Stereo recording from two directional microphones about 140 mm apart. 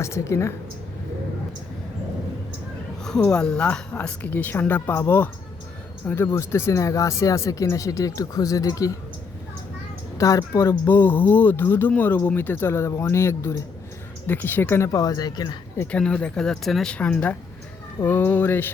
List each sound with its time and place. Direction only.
0.0 s speech: 20° left (ahead or behind)
3.0 s speech: 5° left (ahead or behind); by 8.9 s 25° left (ahead or behind)
10.2 s speech: 25° left (ahead or behind)
15.8 s speech: 10° left (ahead or behind)